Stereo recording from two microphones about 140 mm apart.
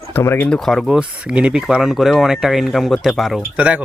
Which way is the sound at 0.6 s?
Centre (ahead or behind).